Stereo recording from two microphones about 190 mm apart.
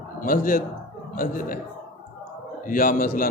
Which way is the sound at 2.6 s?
45° left (ahead or behind).